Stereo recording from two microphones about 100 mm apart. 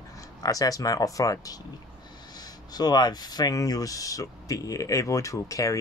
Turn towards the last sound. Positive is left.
turn(degrees=35)  # may be behind; listen again after turning